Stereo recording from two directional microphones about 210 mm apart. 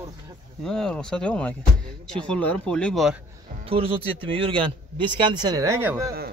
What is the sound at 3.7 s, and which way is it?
Speech, 25° right (ahead or behind).